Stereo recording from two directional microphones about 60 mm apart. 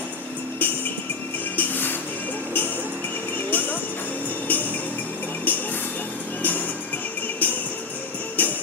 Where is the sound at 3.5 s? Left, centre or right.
Left.